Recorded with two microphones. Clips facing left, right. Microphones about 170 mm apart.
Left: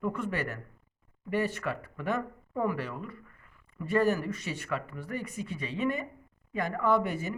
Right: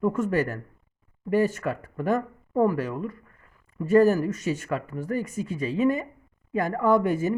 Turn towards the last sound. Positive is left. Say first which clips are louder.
# right 6 dB
turn(degrees=-45)  # may be behind; listen again after turning